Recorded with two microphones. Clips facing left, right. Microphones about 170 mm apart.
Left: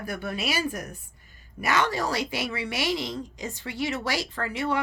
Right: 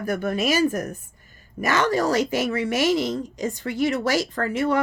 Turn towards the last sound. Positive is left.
turn(degrees=-45)  # may be behind; listen again after turning